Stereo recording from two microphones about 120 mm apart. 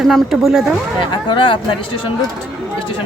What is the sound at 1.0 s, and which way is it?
Speech, 45° left (ahead or behind).